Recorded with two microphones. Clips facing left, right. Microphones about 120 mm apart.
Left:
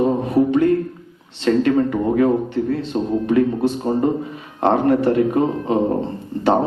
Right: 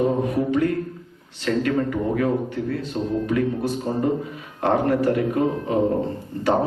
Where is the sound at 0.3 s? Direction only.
25° left (ahead or behind).